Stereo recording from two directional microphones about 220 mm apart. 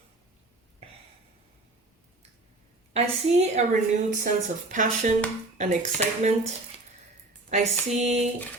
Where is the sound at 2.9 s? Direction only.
30° right (ahead or behind).